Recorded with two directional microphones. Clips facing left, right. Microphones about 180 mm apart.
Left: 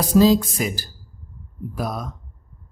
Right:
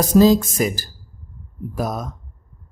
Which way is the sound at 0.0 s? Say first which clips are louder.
Right 2 dB; 45° right (ahead or behind).